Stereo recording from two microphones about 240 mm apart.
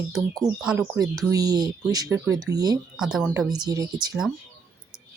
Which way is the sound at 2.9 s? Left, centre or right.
Centre.